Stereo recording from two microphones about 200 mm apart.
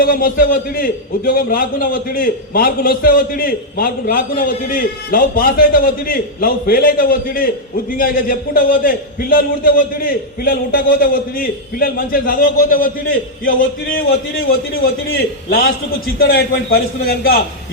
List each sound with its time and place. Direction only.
0.0 s a man's voice: 45° left (ahead or behind)
15.4 s a man's voice: 50° left (ahead or behind)